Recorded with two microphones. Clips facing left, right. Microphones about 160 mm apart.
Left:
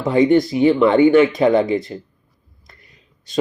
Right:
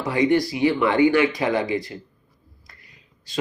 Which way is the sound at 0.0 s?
25° left (ahead or behind).